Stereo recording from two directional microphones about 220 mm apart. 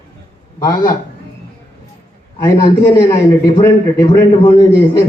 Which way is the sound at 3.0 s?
20° left (ahead or behind).